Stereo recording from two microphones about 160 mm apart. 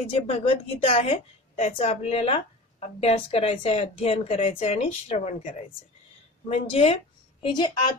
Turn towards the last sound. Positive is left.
turn(degrees=25)  # may be behind; listen again after turning